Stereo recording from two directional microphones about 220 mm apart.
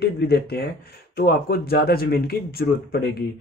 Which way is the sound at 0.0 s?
45° left (ahead or behind).